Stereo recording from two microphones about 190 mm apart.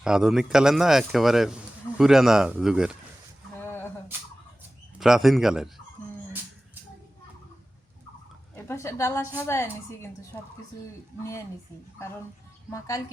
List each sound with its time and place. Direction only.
0.0 s speech: 5° right (ahead or behind)
3.6 s a sound: 10° left (ahead or behind)
4.9 s speech: centre (ahead or behind)
8.5 s a woman's voice: 15° left (ahead or behind)
11.2 s a woman's voice: 15° left (ahead or behind)